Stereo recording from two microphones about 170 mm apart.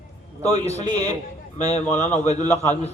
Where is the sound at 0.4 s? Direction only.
40° left (ahead or behind).